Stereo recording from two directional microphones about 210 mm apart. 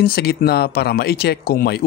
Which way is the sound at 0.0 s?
50° left (ahead or behind).